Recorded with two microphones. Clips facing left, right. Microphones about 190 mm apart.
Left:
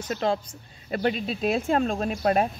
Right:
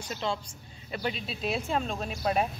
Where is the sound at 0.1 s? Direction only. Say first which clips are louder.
Left 7 dB; 55° left (ahead or behind).